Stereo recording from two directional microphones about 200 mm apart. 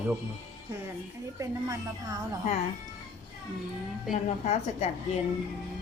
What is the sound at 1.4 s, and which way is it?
Speech, 15° right (ahead or behind).